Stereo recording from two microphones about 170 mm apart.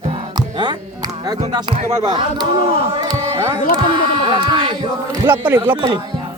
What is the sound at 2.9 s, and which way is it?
Music, 25° right (ahead or behind).